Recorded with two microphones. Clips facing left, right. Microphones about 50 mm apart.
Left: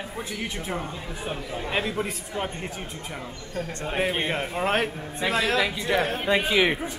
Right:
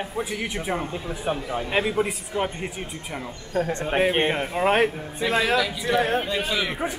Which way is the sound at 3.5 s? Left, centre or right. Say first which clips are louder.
Right 8 dB; right.